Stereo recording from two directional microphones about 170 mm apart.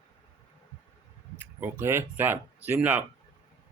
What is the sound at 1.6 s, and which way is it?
Speech, 15° right (ahead or behind).